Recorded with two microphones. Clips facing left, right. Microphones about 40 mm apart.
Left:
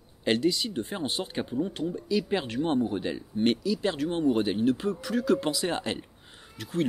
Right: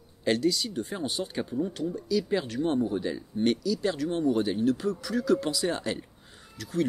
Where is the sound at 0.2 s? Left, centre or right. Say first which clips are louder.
Even; left.